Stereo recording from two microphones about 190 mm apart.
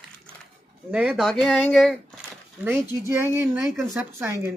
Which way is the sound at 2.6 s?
10° right (ahead or behind).